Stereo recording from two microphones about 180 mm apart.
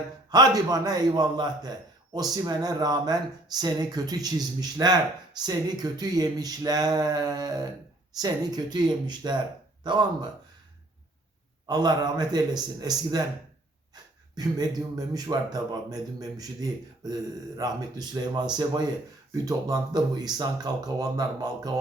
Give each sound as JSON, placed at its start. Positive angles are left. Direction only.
{"t": 0.3, "sound": "speech", "side_deg": -20}
{"t": 11.6, "sound": "speech", "side_deg": -25}